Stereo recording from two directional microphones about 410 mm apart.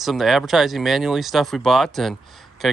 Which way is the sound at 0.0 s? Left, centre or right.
Centre.